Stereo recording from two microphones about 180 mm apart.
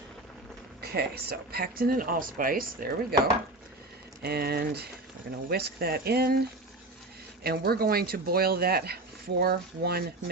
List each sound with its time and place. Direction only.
0.8 s speech: 60° right (ahead or behind)
4.2 s speech: 60° right (ahead or behind)
7.4 s speech: 60° right (ahead or behind)